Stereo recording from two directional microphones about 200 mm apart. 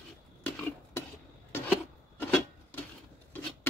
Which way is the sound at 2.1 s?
10° left (ahead or behind).